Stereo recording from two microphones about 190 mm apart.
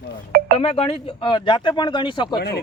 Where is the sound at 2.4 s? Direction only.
55° left (ahead or behind).